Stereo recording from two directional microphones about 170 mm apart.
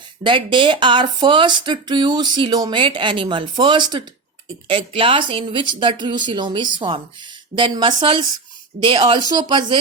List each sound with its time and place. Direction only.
0.2 s speech: 30° right (ahead or behind)